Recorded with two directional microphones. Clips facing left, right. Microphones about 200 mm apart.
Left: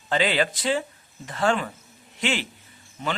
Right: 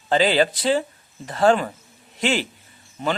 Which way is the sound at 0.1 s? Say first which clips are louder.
Right 5 dB; 35° right (ahead or behind).